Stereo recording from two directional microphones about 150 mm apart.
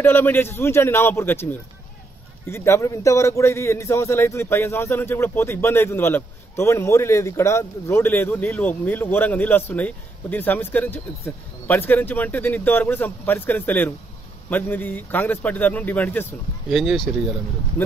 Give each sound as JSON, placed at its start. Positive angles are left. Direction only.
{"t": 0.0, "sound": "speech", "side_deg": 15}
{"t": 2.5, "sound": "speech", "side_deg": 20}
{"t": 16.7, "sound": "speech", "side_deg": 0}
{"t": 17.8, "sound": "speech", "side_deg": 10}